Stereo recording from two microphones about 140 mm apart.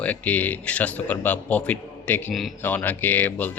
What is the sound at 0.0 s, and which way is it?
Speech, 10° left (ahead or behind).